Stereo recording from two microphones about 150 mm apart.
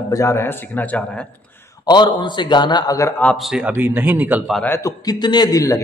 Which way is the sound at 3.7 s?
15° right (ahead or behind).